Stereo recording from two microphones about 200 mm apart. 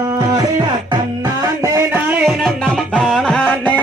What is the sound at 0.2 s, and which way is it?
Music, 20° right (ahead or behind).